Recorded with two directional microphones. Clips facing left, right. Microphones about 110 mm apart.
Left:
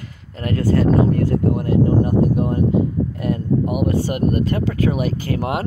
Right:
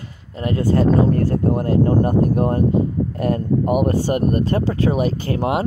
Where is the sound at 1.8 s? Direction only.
50° right (ahead or behind); by 5.7 s 25° right (ahead or behind).